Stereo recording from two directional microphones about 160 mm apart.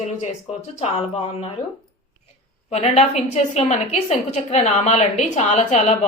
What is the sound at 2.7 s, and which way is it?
A woman's voice, 45° left (ahead or behind).